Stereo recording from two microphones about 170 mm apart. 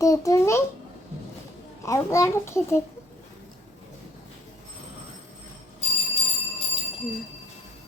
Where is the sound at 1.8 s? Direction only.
20° left (ahead or behind).